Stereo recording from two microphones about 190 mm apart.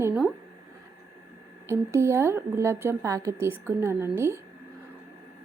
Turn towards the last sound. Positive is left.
turn(degrees=-15)  # may be behind; listen again after turning